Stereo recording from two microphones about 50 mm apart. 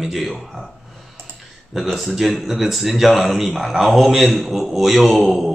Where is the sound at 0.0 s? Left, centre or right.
Centre.